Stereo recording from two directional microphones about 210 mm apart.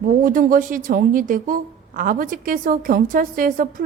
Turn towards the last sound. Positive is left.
turn(degrees=-40)  # may be behind; listen again after turning